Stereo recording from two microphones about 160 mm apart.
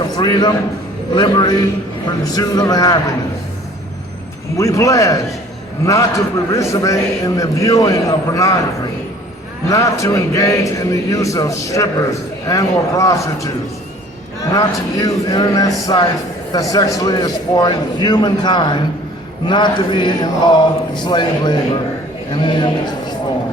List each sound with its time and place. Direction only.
0.2 s a man's voice: 25° left (ahead or behind)
4.5 s a man's voice: 20° left (ahead or behind)
9.6 s a man's voice: 20° left (ahead or behind)
14.5 s a man's voice: 20° left (ahead or behind)